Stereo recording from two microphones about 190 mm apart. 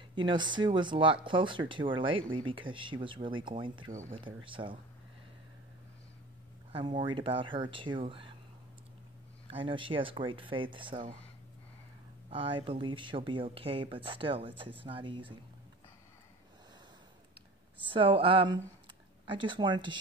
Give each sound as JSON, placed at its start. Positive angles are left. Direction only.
{"t": 0.1, "sound": "speech", "side_deg": -25}
{"t": 6.7, "sound": "speech", "side_deg": -25}
{"t": 9.5, "sound": "speech", "side_deg": -25}
{"t": 12.3, "sound": "speech", "side_deg": -25}
{"t": 17.8, "sound": "speech", "side_deg": -25}